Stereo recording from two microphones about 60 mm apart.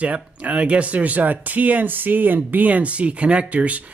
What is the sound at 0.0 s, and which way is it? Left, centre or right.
Speech, right.